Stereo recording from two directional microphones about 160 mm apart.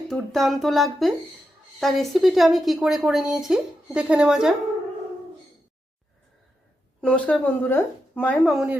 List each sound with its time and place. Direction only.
0.1 s a woman's voice: centre (ahead or behind)
7.0 s a woman's voice: 10° left (ahead or behind)
8.5 s a woman's voice: 5° right (ahead or behind)